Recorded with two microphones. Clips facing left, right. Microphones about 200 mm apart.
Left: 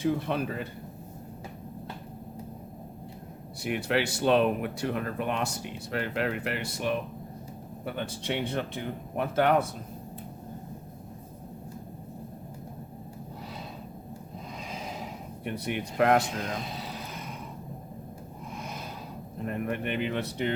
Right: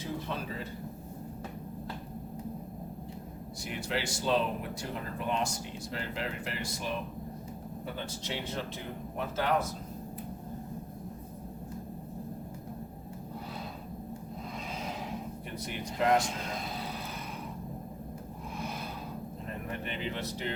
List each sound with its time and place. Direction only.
0.0 s speech: 65° left (ahead or behind)
3.6 s speech: 60° left (ahead or behind)
15.6 s speech: 65° left (ahead or behind)
19.5 s speech: 60° left (ahead or behind)